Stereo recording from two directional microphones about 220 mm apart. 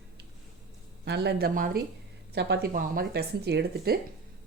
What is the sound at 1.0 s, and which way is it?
Speech, 50° right (ahead or behind).